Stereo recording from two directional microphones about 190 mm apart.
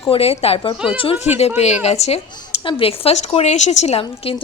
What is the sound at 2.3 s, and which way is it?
A woman's voice, 20° left (ahead or behind).